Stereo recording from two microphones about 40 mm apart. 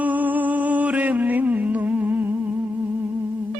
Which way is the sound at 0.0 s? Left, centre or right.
Right.